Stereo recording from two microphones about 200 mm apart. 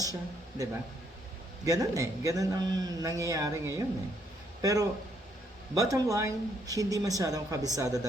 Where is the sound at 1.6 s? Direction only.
20° right (ahead or behind).